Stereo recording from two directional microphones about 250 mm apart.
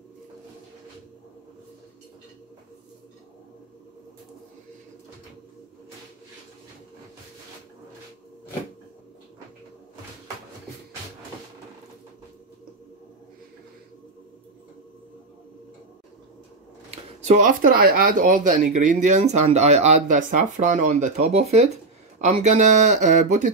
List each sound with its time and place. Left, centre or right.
16.9 s speech: right